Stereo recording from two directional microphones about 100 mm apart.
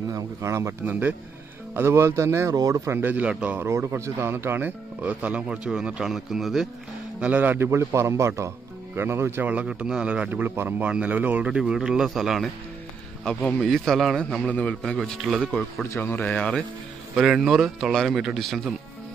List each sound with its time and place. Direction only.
0.1 s a man's voice: 30° right (ahead or behind); by 6.7 s centre (ahead or behind)
7.2 s a man's voice: 15° right (ahead or behind)
15.8 s speech: 20° left (ahead or behind)
17.1 s a man's voice: 5° right (ahead or behind)